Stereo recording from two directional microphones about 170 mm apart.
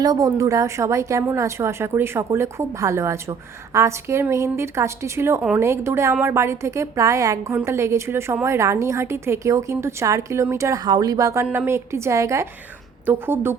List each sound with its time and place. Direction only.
0.0 s a woman's voice: 20° right (ahead or behind)